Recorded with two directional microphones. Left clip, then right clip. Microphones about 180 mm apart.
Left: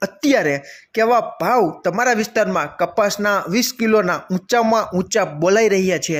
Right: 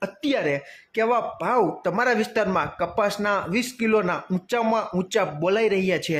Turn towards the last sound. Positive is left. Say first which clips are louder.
# left 5 dB
turn(degrees=15)  # may be behind; listen again after turning